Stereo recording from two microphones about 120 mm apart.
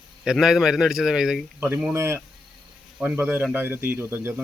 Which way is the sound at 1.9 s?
20° right (ahead or behind).